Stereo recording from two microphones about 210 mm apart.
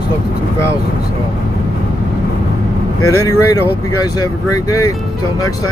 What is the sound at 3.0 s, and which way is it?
Speech, 15° left (ahead or behind).